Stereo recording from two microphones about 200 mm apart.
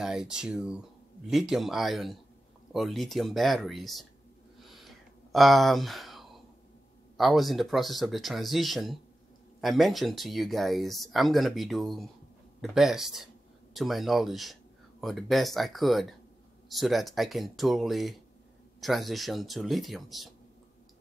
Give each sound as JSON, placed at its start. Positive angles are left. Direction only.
{"t": 0.0, "sound": "speech", "side_deg": -5}
{"t": 4.6, "sound": "a sound", "side_deg": 0}
{"t": 7.2, "sound": "speech", "side_deg": 0}